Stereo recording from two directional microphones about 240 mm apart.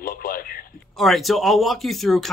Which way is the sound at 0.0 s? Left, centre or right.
Left.